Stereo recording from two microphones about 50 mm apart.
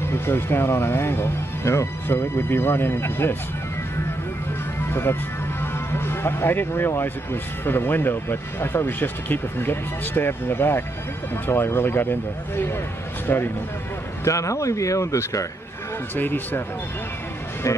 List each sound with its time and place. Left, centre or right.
0.0 s speech: left
5.6 s music: left
7.6 s speech: left
14.2 s speech: left
17.6 s speech: left